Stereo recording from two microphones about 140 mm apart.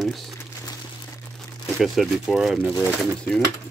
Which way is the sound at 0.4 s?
25° left (ahead or behind).